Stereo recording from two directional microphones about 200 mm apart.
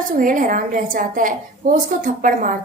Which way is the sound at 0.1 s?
40° right (ahead or behind).